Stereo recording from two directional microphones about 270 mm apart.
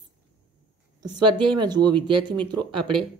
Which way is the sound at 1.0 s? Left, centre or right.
Centre.